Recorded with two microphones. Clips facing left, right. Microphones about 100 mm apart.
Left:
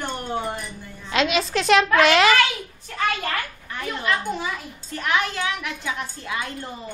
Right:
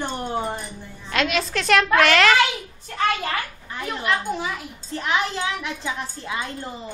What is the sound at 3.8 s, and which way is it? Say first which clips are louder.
Speech: even; 10° right (ahead or behind).